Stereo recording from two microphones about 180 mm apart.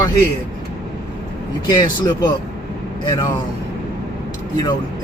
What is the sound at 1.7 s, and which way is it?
Speech, 20° left (ahead or behind).